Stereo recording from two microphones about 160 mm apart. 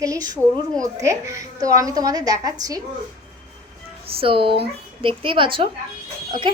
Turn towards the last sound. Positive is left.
turn(degrees=-30)  # may be behind; listen again after turning